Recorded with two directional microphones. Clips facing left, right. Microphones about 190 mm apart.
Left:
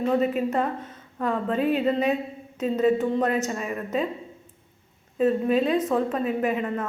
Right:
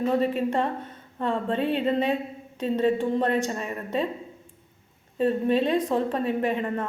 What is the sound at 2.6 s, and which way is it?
Speech, 30° right (ahead or behind).